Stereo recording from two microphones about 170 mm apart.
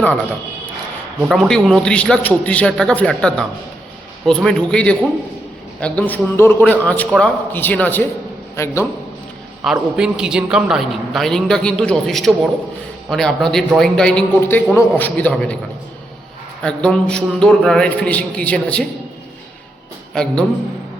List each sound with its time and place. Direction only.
1.3 s a man's voice: centre (ahead or behind)
9.6 s a man's voice: 5° right (ahead or behind)
16.6 s a man's voice: 5° left (ahead or behind)